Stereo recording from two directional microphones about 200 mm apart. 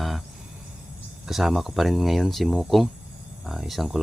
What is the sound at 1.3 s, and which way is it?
Speech, centre (ahead or behind).